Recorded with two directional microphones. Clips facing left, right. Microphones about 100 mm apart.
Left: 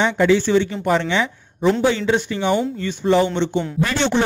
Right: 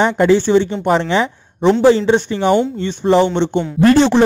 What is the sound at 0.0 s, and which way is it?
A woman's voice, 35° right (ahead or behind).